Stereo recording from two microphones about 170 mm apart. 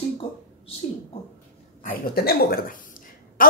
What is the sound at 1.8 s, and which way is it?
A woman's voice, 60° left (ahead or behind).